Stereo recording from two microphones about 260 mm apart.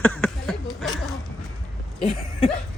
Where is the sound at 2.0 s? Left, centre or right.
Left.